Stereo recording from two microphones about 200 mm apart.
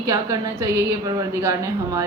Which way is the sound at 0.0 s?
15° right (ahead or behind).